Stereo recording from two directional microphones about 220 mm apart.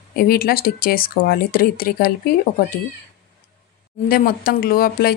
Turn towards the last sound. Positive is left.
turn(degrees=40)  # may be behind; listen again after turning